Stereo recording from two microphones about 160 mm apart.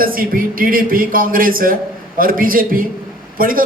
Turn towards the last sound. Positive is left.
turn(degrees=-60)  # may be behind; listen again after turning